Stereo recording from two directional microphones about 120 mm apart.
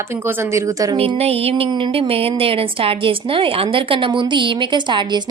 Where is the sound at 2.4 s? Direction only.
50° right (ahead or behind).